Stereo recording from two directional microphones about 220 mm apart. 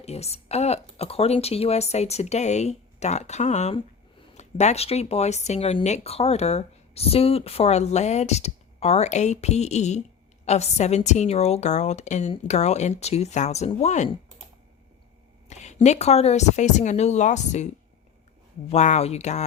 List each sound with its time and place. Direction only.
0.0 s a woman's voice: 30° left (ahead or behind)
15.4 s a woman's voice: 30° left (ahead or behind)
18.7 s a woman's voice: 30° left (ahead or behind)